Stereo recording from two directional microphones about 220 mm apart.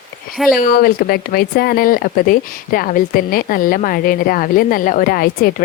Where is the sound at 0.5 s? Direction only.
40° left (ahead or behind).